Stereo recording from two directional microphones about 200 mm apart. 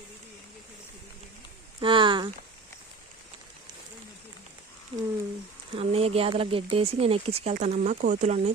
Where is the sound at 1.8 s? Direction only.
25° right (ahead or behind).